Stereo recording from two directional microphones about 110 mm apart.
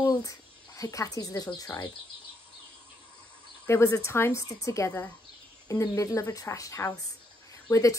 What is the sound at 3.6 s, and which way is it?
Speech, 25° left (ahead or behind).